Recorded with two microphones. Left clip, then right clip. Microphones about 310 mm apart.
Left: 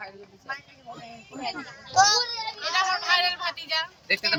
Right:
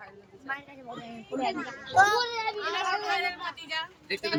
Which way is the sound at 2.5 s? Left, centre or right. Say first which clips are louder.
Left 5 dB; centre.